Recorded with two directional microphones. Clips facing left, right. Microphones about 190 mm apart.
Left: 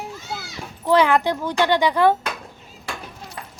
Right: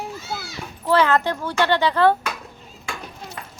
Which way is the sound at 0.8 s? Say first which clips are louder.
Left 1 dB; 15° left (ahead or behind).